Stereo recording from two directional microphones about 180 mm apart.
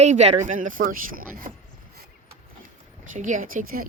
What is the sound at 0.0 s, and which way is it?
Speech, 40° right (ahead or behind).